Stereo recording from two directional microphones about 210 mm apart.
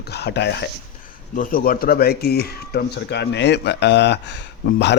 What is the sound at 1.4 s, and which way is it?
Speech, 45° left (ahead or behind).